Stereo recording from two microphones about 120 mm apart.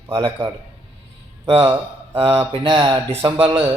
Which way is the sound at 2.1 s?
50° right (ahead or behind).